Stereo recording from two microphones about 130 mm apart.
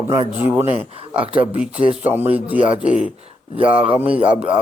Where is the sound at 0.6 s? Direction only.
45° left (ahead or behind).